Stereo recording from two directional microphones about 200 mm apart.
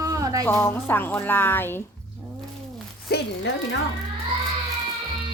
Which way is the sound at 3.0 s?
60° left (ahead or behind).